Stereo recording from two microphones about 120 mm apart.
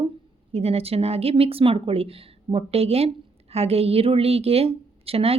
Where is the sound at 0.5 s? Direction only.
55° right (ahead or behind).